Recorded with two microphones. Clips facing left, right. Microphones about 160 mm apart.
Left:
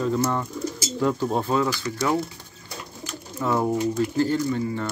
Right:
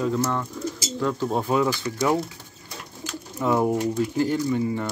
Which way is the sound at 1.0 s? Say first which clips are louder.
Left 2 dB; 10° left (ahead or behind).